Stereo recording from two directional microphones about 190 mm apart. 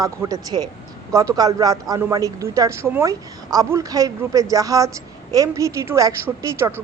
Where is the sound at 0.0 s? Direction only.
20° right (ahead or behind).